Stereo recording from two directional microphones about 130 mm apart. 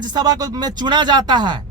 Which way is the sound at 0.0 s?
30° right (ahead or behind).